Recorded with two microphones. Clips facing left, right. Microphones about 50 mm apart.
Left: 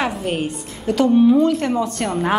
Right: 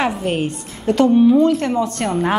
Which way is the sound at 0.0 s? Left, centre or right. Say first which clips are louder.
Right 2 dB; centre.